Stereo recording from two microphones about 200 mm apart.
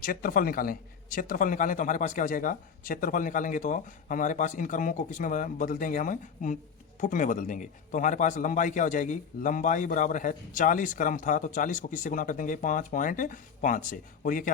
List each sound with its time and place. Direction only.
0.0 s a man's voice: 45° left (ahead or behind)